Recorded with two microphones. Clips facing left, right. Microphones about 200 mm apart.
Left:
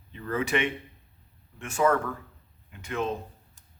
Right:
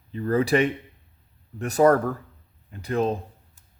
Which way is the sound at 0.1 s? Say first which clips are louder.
Right 7 dB; 35° right (ahead or behind).